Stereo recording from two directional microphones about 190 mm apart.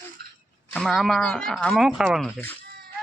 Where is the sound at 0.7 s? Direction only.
Centre (ahead or behind).